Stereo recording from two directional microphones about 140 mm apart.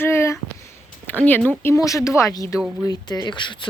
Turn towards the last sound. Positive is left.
turn(degrees=35)  # may be behind; listen again after turning